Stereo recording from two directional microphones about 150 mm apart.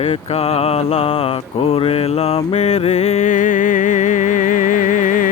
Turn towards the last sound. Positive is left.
turn(degrees=60)  # may be behind; listen again after turning